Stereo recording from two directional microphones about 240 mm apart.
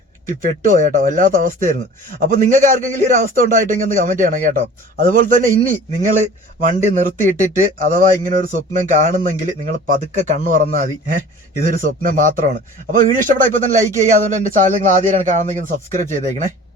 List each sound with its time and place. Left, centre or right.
0.3 s speech: right